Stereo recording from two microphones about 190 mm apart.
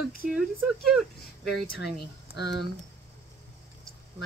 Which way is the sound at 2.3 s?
65° left (ahead or behind).